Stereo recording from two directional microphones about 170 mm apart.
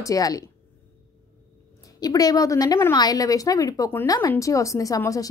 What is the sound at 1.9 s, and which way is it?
A woman's voice, 20° left (ahead or behind).